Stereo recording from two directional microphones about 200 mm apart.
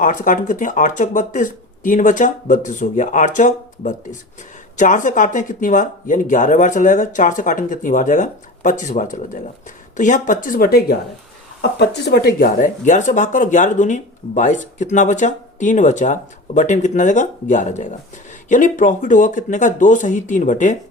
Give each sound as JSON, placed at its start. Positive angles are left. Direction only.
{"t": 0.0, "sound": "speech", "side_deg": 40}
{"t": 12.0, "sound": "speech", "side_deg": 55}